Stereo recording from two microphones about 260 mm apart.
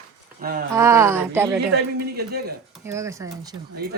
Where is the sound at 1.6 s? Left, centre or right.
Right.